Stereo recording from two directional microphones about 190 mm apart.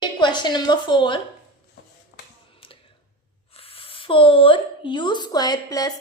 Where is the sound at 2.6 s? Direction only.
30° left (ahead or behind).